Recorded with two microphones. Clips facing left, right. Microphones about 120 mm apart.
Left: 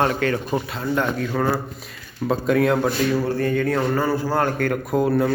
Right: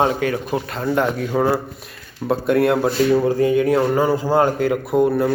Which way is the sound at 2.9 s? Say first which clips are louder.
Right 5 dB; 20° right (ahead or behind).